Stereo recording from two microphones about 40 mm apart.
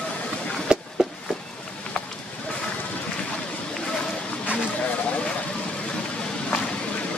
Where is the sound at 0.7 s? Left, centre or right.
Right.